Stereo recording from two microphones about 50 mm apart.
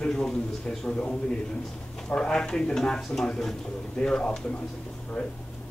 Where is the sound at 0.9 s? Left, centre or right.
Centre.